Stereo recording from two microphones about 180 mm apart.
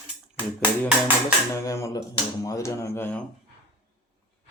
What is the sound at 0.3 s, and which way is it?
Speech, 10° right (ahead or behind).